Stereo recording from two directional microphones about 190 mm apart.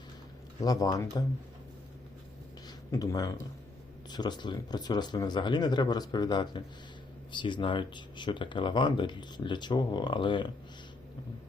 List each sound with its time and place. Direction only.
0.6 s speech: 20° left (ahead or behind)
2.6 s speech: 20° left (ahead or behind)